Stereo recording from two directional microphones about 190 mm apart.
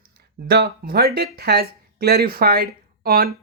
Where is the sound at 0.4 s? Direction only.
55° right (ahead or behind).